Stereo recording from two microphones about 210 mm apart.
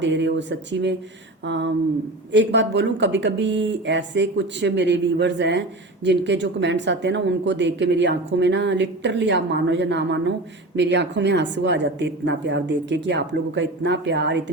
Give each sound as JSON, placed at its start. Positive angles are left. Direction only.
{"t": 0.0, "sound": "speech", "side_deg": -60}